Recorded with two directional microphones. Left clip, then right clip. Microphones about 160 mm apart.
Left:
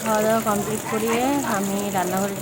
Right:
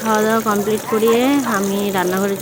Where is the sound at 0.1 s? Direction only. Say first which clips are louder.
Right 4 dB; 30° right (ahead or behind).